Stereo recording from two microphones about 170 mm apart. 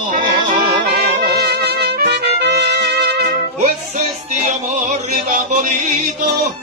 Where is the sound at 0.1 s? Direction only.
60° right (ahead or behind).